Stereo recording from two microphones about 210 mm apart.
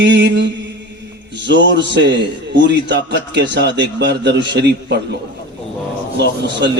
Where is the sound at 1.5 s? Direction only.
60° right (ahead or behind).